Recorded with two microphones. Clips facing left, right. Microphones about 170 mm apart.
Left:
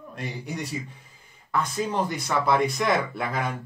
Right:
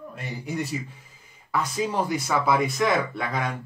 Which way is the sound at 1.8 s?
10° right (ahead or behind).